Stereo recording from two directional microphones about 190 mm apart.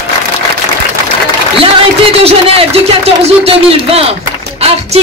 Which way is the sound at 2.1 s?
30° right (ahead or behind).